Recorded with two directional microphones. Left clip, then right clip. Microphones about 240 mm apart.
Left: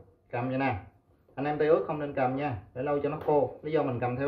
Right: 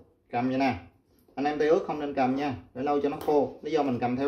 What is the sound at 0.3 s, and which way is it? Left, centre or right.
Speech, right.